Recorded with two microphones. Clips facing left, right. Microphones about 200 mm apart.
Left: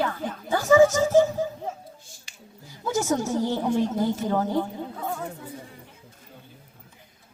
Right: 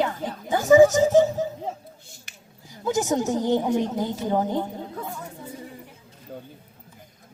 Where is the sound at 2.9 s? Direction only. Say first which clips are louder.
Right 2 dB; 15° right (ahead or behind).